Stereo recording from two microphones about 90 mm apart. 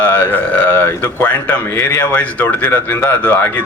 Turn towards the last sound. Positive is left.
turn(degrees=20)  # may be behind; listen again after turning